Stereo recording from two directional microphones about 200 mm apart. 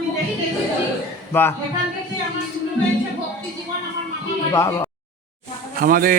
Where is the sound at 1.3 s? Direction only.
10° left (ahead or behind).